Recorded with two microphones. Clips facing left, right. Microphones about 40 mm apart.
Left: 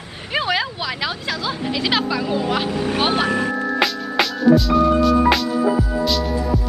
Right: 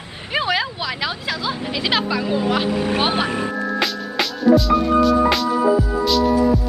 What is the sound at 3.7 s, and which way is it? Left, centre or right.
Music, centre.